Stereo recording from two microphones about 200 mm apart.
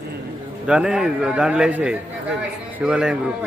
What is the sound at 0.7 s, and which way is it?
A man's voice, 5° right (ahead or behind).